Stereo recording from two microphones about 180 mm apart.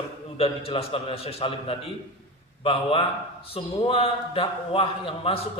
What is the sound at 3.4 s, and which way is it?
A man's voice, 30° left (ahead or behind).